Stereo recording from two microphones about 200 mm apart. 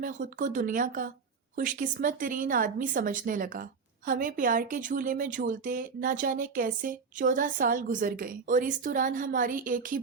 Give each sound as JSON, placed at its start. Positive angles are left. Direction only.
{"t": 0.0, "sound": "speech", "side_deg": -40}